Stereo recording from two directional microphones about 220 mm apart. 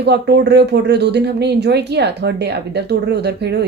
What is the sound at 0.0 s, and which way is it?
Speech, 50° right (ahead or behind).